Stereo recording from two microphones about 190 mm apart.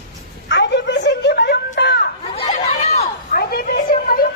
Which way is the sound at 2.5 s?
35° left (ahead or behind).